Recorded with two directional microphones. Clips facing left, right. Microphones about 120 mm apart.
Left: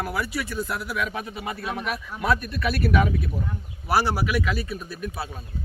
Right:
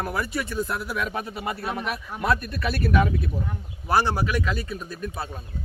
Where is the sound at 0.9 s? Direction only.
35° right (ahead or behind).